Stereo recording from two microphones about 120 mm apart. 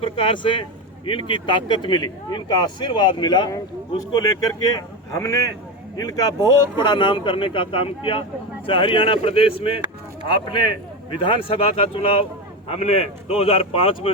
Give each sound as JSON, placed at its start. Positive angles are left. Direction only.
{"t": 0.0, "sound": "speech", "side_deg": 45}